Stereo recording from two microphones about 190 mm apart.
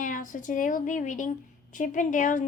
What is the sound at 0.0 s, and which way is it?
A woman's voice, 45° left (ahead or behind).